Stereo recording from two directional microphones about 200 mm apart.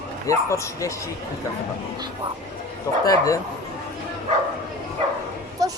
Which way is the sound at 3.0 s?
15° left (ahead or behind).